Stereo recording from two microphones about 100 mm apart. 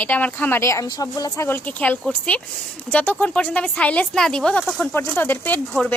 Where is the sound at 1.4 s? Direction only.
20° left (ahead or behind).